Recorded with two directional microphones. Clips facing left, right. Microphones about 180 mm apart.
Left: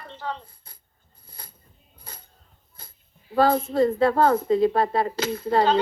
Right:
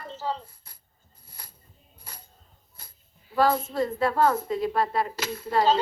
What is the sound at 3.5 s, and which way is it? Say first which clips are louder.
A woman's voice: left 7 dB; 55° left (ahead or behind).